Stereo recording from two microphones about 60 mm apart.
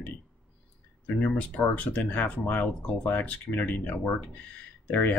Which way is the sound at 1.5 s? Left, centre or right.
Left.